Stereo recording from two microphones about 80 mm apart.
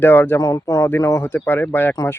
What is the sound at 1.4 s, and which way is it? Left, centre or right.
Speech, left.